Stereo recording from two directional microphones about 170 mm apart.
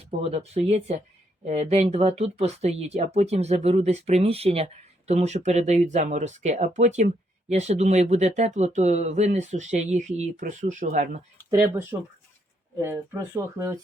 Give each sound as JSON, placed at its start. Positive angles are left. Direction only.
{"t": 0.0, "sound": "speech", "side_deg": -35}
{"t": 11.5, "sound": "speech", "side_deg": -15}